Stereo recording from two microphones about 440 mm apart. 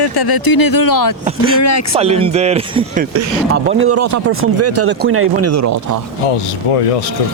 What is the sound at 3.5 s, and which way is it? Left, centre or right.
Speech, right.